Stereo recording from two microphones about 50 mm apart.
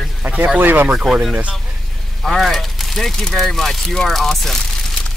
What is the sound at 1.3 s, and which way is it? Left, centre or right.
Speech, centre.